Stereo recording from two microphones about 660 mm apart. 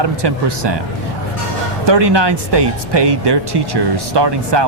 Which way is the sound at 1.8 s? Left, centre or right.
Right.